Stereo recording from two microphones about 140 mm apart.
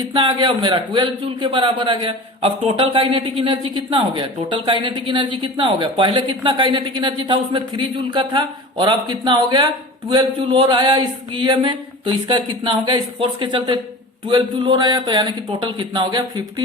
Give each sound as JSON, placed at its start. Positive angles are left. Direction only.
{"t": 0.1, "sound": "a man's voice", "side_deg": -35}